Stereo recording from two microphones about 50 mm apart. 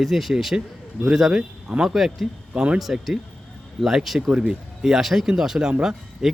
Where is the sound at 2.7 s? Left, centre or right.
Centre.